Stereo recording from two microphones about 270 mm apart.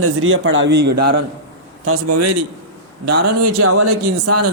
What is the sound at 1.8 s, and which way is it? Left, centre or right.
A man's voice, right.